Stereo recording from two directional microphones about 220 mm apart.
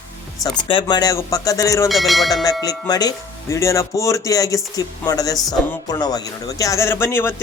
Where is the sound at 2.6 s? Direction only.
15° left (ahead or behind).